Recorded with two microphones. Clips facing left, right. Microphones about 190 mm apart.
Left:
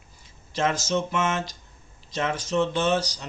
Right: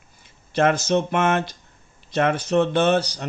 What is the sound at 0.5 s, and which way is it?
Speech, 60° right (ahead or behind).